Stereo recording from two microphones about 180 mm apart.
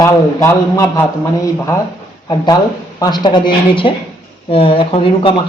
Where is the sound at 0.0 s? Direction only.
15° left (ahead or behind).